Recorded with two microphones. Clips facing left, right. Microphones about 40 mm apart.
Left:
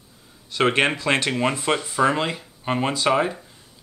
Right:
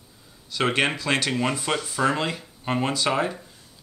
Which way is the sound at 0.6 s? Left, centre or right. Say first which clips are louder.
Left 3 dB; left.